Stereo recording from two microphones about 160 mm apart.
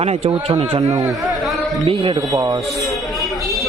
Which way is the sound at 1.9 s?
35° right (ahead or behind).